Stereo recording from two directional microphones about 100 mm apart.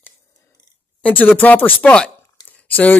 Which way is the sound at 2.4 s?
15° left (ahead or behind).